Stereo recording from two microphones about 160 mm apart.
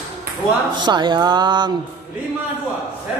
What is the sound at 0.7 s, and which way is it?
A woman's voice, 30° right (ahead or behind).